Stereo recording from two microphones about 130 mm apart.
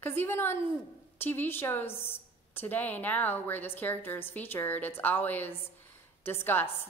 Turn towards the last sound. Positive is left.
turn(degrees=15)  # may be behind; listen again after turning